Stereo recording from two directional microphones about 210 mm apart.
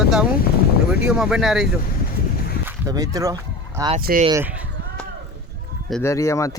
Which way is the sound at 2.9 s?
15° right (ahead or behind).